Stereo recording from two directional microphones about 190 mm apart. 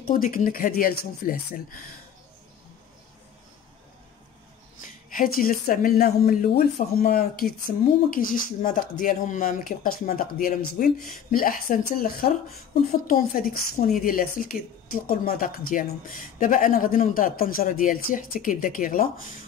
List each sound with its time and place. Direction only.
0.0 s speech: 45° left (ahead or behind)
4.8 s speech: 45° left (ahead or behind)
13.0 s speech: 45° left (ahead or behind)